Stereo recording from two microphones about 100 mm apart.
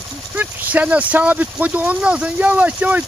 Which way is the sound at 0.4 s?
15° right (ahead or behind).